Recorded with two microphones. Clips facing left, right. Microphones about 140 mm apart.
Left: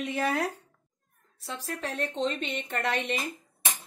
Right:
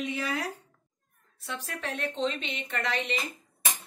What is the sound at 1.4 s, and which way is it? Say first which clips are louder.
A woman's voice: left 1 dB; 35° left (ahead or behind).